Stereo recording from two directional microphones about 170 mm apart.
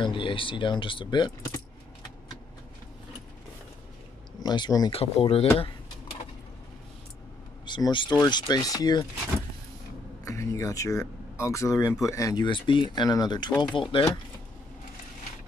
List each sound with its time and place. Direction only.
0.0 s speech: 30° left (ahead or behind)
4.4 s speech: 25° left (ahead or behind)
4.9 s speech: 35° left (ahead or behind)
7.6 s speech: 25° left (ahead or behind)
10.2 s speech: 15° left (ahead or behind)